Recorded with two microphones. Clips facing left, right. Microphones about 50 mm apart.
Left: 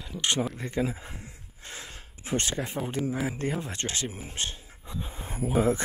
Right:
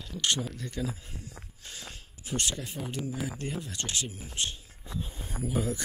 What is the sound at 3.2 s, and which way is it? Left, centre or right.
Speech, left.